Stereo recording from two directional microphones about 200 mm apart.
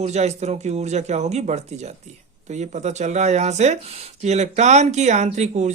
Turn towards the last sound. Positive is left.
turn(degrees=-35)  # may be behind; listen again after turning